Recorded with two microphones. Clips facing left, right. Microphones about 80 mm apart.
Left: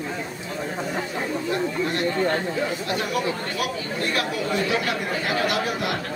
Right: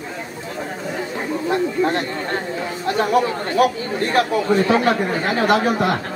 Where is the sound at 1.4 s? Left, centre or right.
Right.